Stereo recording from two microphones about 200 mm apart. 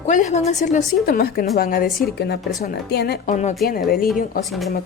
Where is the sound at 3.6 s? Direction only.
50° left (ahead or behind).